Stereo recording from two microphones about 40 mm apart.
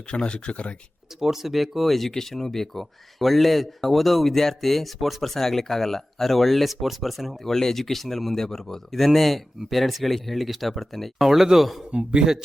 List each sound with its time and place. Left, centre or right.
0.1 s speech: left
1.2 s speech: centre
7.4 s speech: centre
11.2 s speech: centre
11.9 s speech: right